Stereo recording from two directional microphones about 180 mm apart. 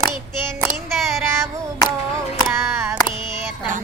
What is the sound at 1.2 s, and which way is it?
Child singing, 15° right (ahead or behind).